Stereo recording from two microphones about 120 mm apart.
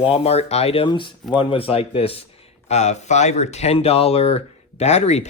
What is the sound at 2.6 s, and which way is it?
Speech, 70° left (ahead or behind).